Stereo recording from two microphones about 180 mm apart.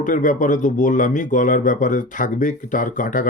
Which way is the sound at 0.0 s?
45° left (ahead or behind).